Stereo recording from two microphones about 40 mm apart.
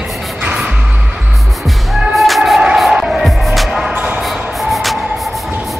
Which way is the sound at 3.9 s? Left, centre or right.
Right.